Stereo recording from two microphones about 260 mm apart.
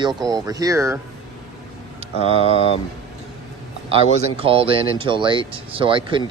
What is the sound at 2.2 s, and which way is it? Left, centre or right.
Speech, left.